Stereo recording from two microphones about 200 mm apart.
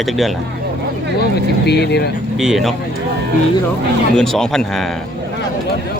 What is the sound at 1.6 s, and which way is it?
Speech, 55° left (ahead or behind).